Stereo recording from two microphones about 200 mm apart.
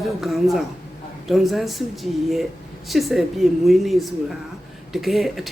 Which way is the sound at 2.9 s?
Centre (ahead or behind).